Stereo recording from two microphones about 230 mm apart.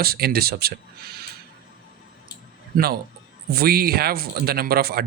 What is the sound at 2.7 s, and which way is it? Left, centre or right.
Speech, right.